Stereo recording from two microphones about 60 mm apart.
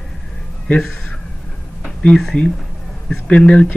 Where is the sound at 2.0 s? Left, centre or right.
Centre.